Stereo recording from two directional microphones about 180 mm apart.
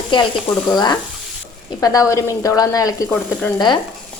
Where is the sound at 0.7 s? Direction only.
25° left (ahead or behind).